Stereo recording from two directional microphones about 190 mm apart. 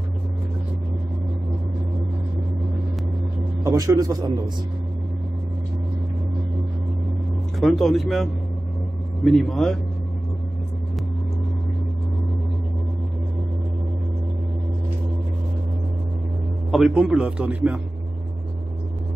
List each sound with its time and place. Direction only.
3.6 s a man's voice: 20° right (ahead or behind)
7.6 s speech: centre (ahead or behind)
16.7 s a man's voice: centre (ahead or behind)